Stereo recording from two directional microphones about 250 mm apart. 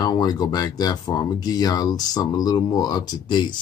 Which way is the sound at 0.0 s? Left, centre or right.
Centre.